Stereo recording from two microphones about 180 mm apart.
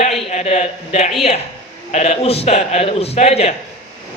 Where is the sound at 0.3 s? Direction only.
40° left (ahead or behind).